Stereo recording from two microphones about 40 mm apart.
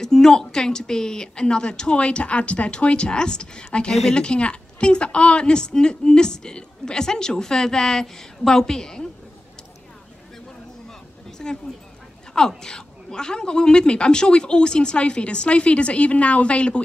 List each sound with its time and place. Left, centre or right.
0.0 s a woman's voice: centre
11.2 s a sound: centre
12.4 s a woman's voice: centre